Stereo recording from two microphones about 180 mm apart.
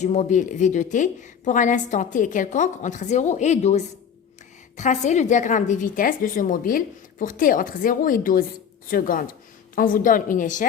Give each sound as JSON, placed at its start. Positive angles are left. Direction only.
{"t": 0.0, "sound": "a woman's voice", "side_deg": 40}